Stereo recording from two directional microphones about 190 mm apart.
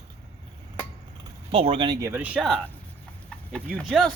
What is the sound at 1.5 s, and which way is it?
Speech, 30° right (ahead or behind).